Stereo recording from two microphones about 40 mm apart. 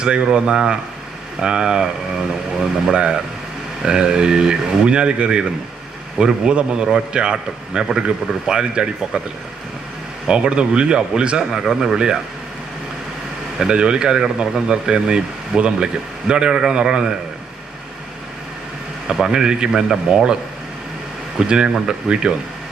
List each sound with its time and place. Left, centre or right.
0.0 s speech: right
10.2 s speech: right
11.5 s speech: centre
13.7 s speech: right
19.0 s speech: centre
21.3 s speech: right